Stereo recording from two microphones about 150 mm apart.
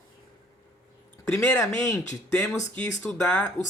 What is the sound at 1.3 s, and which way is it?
Speech, 15° left (ahead or behind).